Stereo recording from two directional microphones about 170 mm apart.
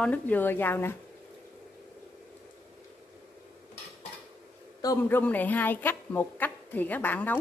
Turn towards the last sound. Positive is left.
turn(degrees=10)  # may be behind; listen again after turning